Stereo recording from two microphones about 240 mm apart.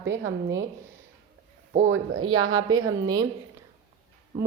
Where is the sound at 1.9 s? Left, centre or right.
Right.